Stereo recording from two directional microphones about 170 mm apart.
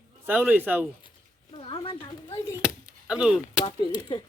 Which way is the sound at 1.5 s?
30° left (ahead or behind).